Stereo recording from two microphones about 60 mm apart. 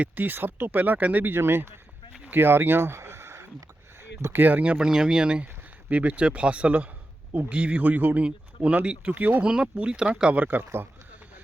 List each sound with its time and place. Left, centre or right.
0.0 s speech: right
4.9 s speech: centre; by 10.6 s right
10.6 s speech: right